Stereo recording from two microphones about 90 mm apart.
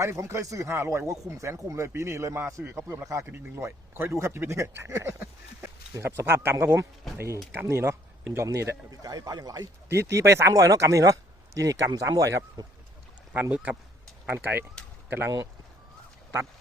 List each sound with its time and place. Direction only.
0.0 s a man's voice: 35° right (ahead or behind)
9.0 s a man's voice: 45° right (ahead or behind)
9.9 s a man's voice: 30° right (ahead or behind)
13.3 s speech: 15° right (ahead or behind)